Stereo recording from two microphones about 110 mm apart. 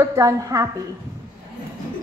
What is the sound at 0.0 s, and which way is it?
Speech, 30° right (ahead or behind).